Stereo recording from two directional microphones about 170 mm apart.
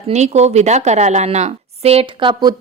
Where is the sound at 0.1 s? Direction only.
40° right (ahead or behind).